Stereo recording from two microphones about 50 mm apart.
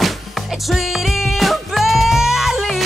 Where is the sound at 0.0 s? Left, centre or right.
Centre.